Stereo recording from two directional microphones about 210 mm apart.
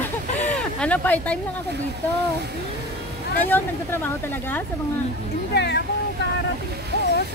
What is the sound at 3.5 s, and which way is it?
Speech, 10° left (ahead or behind).